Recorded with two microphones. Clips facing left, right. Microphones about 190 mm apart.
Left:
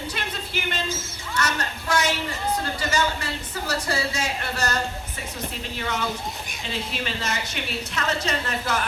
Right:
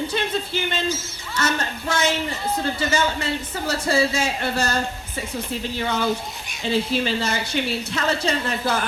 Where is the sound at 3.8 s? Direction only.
25° right (ahead or behind).